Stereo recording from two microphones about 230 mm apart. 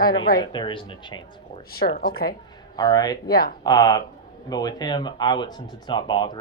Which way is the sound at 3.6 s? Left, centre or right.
Centre.